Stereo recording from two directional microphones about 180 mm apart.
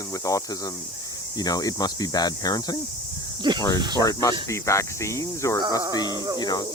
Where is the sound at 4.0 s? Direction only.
20° left (ahead or behind).